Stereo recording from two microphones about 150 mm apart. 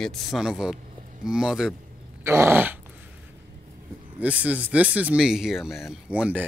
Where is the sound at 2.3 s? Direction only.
15° right (ahead or behind).